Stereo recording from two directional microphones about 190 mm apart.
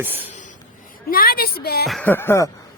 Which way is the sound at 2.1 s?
10° left (ahead or behind).